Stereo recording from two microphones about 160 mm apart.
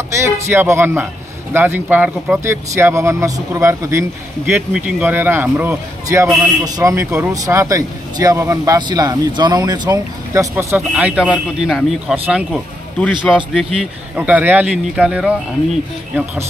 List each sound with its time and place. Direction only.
0.1 s a man's voice: 15° right (ahead or behind)
10.8 s a man's voice: 5° right (ahead or behind)
14.1 s a man's voice: 10° right (ahead or behind)